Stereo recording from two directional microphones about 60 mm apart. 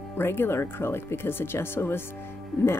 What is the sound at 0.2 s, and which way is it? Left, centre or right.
Speech, left.